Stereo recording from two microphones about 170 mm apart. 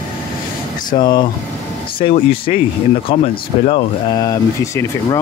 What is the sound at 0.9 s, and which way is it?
Speech, 25° left (ahead or behind).